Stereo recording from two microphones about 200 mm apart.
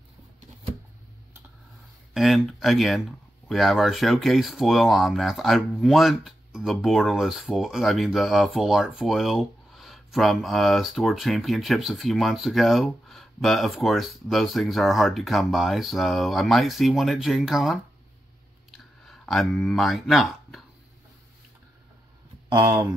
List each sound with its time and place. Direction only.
2.1 s speech: centre (ahead or behind)
18.7 s a sound: centre (ahead or behind)
22.5 s speech: 20° right (ahead or behind)